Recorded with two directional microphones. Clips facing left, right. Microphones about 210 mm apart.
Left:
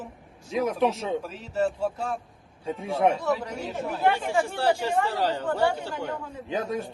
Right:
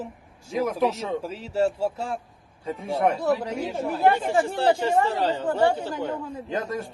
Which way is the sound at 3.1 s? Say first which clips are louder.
Right 3 dB; 35° right (ahead or behind).